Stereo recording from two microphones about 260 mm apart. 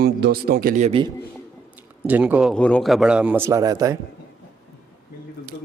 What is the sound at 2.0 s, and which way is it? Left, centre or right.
A man's voice, centre.